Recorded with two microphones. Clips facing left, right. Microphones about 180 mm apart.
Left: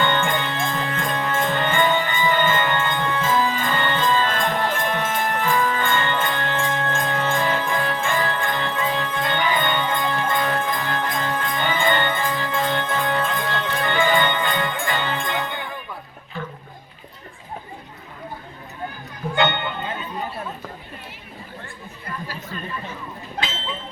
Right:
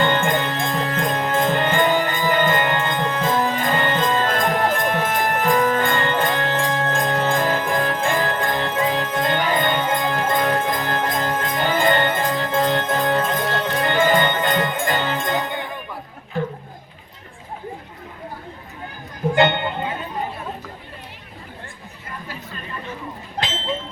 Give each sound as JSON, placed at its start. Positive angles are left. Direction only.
{"t": 0.0, "sound": "music", "side_deg": -40}